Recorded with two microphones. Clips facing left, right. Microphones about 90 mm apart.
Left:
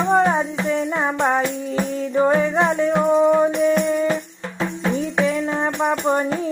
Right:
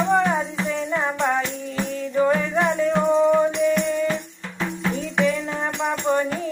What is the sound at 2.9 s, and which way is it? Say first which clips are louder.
Music: left 1 dB; 15° left (ahead or behind).